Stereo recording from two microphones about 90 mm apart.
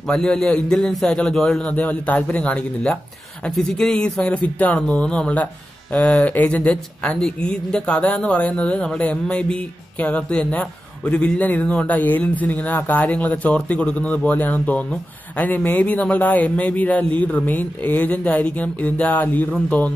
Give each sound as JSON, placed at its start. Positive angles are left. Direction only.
{"t": 0.1, "sound": "speech", "side_deg": 10}